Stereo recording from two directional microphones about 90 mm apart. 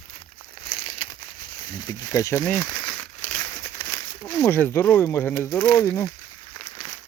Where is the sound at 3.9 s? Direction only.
45° left (ahead or behind).